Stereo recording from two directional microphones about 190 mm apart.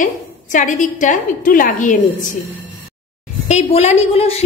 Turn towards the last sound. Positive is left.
turn(degrees=30)  # may be behind; listen again after turning